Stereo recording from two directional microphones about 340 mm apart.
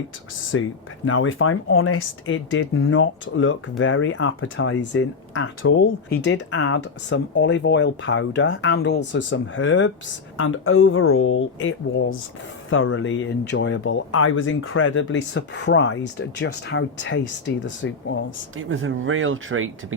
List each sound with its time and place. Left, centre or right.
0.5 s speech: left
18.5 s speech: right